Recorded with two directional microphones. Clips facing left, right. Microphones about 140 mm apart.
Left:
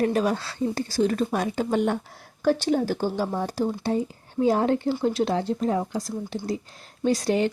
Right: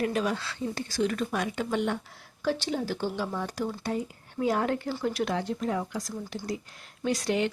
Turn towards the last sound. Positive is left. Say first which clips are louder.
# left 5 dB
turn(degrees=35)  # may be behind; listen again after turning